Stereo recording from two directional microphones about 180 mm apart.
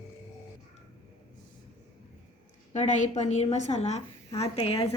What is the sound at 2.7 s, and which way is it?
A woman's voice, 40° left (ahead or behind).